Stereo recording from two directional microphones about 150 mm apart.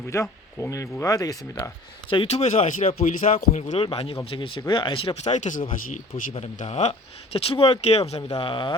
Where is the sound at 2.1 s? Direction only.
40° left (ahead or behind); by 5.9 s 60° left (ahead or behind).